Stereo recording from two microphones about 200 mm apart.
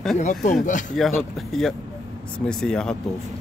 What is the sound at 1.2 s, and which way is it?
Speech, centre (ahead or behind).